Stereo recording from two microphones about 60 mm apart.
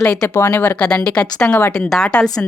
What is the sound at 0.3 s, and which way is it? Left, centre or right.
Speech, left.